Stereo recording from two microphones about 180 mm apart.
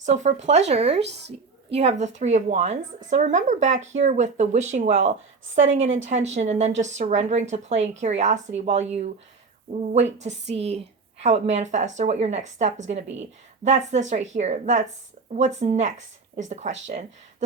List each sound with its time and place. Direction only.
0.0 s a woman's voice: 40° right (ahead or behind)
1.0 s speech: 75° right (ahead or behind)
1.7 s a woman's voice: 40° right (ahead or behind)